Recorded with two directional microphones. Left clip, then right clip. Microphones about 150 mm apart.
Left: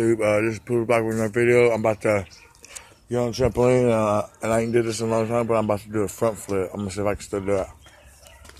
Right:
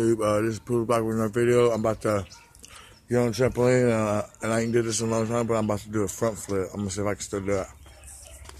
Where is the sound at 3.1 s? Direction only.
30° right (ahead or behind).